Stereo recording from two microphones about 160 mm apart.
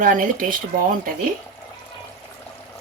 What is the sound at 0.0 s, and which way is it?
Speech, 55° right (ahead or behind).